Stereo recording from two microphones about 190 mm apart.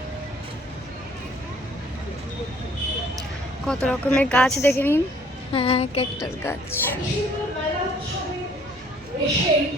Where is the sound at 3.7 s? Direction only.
5° left (ahead or behind).